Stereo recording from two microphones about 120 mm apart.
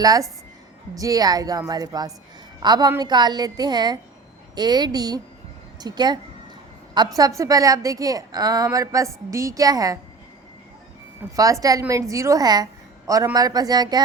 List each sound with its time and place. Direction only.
0.0 s a woman's voice: 30° right (ahead or behind)
7.2 s a woman's voice: 30° right (ahead or behind)
11.3 s a woman's voice: 30° right (ahead or behind)